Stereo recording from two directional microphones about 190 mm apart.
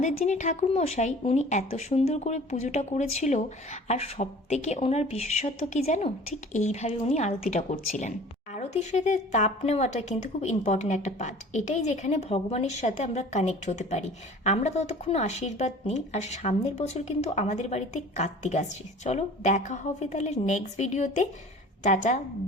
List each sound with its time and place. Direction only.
0.0 s speech: 40° left (ahead or behind)